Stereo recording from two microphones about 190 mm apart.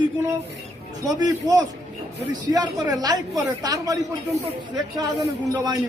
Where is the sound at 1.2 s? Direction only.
20° right (ahead or behind).